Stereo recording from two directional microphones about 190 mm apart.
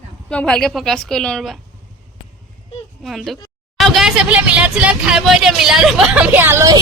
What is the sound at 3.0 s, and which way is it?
A woman's voice, centre (ahead or behind).